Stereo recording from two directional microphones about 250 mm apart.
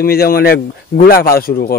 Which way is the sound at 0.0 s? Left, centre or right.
Left.